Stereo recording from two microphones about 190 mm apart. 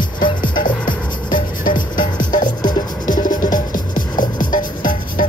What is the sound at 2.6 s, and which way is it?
Music, 20° left (ahead or behind).